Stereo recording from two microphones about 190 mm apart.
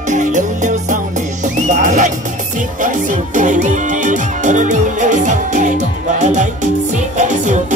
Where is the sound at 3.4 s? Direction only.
40° right (ahead or behind).